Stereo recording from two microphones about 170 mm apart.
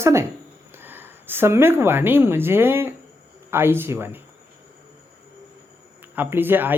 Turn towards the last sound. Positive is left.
turn(degrees=-10)  # may be behind; listen again after turning